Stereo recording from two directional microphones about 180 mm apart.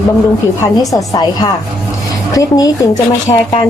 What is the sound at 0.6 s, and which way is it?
A woman's voice, 20° left (ahead or behind).